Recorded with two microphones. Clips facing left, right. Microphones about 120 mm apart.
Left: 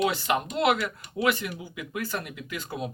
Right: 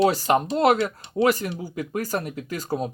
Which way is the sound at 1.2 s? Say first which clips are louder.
Right 5 dB; 40° right (ahead or behind).